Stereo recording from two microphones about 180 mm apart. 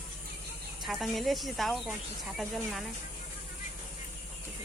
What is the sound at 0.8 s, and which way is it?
Speech, centre (ahead or behind).